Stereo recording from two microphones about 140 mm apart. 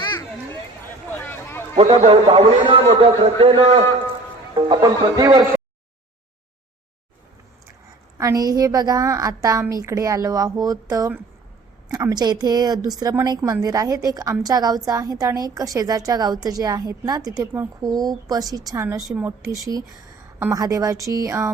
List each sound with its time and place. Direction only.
0.0 s a sound: 30° left (ahead or behind)
1.1 s a sound: 15° left (ahead or behind)
1.7 s a man's voice: 50° right (ahead or behind)
4.5 s speech: 30° right (ahead or behind)
8.2 s speech: 25° right (ahead or behind)
11.9 s speech: 25° right (ahead or behind)